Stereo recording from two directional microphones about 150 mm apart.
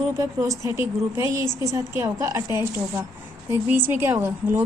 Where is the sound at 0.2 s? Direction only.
20° right (ahead or behind).